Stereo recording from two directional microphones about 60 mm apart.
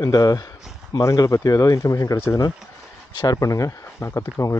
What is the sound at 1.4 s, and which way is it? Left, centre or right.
Speech, left.